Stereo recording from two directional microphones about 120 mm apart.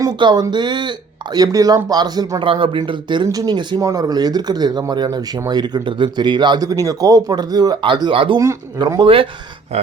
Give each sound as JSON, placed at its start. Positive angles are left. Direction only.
{"t": 0.2, "sound": "speech", "side_deg": -40}
{"t": 2.5, "sound": "speech", "side_deg": -45}
{"t": 9.7, "sound": "speech", "side_deg": -60}